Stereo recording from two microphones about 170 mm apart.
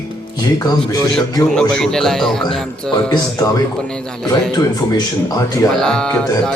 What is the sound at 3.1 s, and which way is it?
Speech, 20° left (ahead or behind).